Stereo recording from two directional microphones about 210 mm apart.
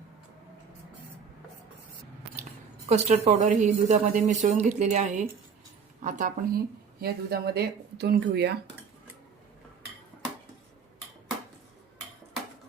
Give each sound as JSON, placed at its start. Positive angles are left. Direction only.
{"t": 2.9, "sound": "a woman's voice", "side_deg": -30}